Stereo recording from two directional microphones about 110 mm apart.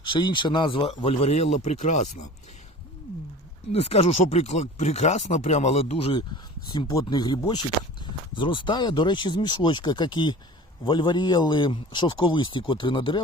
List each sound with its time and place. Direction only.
0.0 s speech: 45° left (ahead or behind)
1.3 s speech: 90° left
3.7 s speech: 65° left (ahead or behind)
6.7 s speech: 45° left (ahead or behind)